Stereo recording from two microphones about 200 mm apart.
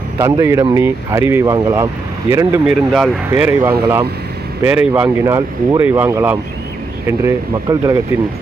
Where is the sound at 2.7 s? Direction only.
5° right (ahead or behind).